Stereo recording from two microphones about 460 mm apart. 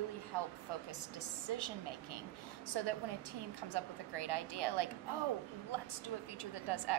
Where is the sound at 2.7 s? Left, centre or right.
Right.